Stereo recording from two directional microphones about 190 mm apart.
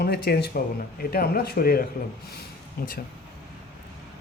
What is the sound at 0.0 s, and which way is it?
Speech, 60° left (ahead or behind).